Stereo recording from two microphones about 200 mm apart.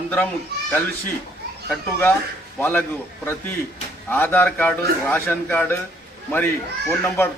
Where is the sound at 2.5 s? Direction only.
10° left (ahead or behind).